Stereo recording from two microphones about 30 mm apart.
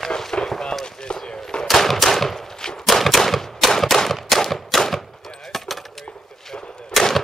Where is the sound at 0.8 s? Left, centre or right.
Left.